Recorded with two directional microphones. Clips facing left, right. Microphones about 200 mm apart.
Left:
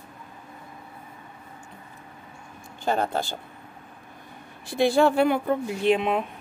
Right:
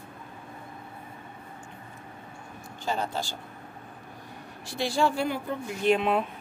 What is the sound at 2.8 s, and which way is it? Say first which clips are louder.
Speech: left 5 dB; 60° left (ahead or behind).